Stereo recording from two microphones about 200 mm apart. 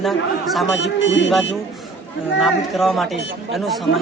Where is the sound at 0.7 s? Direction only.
65° left (ahead or behind).